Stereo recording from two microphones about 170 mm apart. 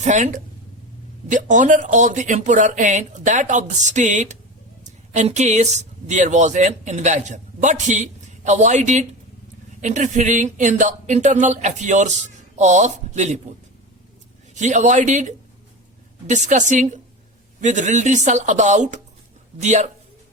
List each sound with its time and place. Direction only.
0.0 s speech: 45° right (ahead or behind)
14.5 s speech: 45° right (ahead or behind)